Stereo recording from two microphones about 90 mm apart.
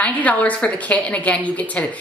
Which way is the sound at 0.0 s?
15° left (ahead or behind).